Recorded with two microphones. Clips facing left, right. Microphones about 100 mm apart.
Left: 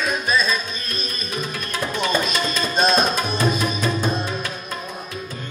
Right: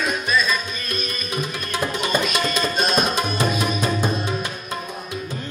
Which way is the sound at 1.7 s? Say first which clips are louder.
Even; 10° right (ahead or behind).